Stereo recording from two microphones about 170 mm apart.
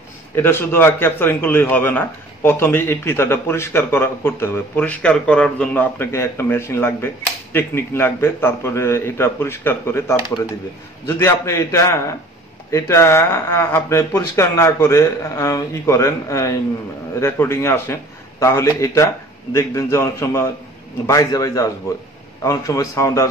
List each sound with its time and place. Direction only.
0.4 s a man's voice: 15° left (ahead or behind)